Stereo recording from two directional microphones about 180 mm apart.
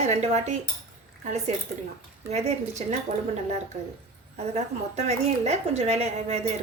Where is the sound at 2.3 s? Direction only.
40° right (ahead or behind).